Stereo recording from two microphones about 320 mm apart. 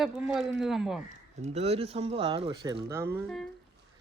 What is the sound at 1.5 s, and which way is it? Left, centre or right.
Speech, centre.